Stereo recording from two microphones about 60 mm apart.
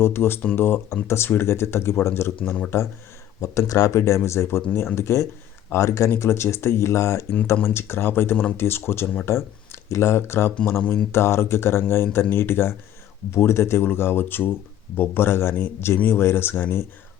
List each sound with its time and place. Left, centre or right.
0.0 s speech: left